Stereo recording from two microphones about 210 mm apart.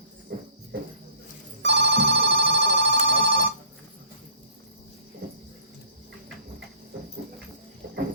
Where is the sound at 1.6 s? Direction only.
55° right (ahead or behind).